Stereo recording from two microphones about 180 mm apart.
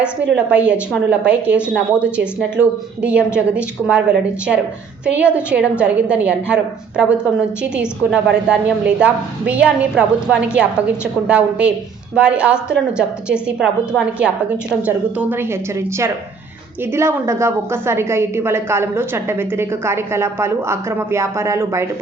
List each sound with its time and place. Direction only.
0.3 s a woman's voice: 5° right (ahead or behind)
16.9 s a woman's voice: 15° right (ahead or behind)